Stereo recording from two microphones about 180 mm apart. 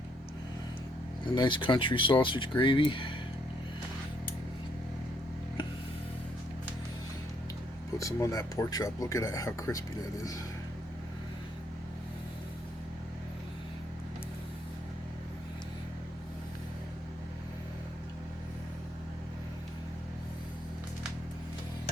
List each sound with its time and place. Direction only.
1.4 s speech: 25° left (ahead or behind)
7.9 s speech: 20° left (ahead or behind)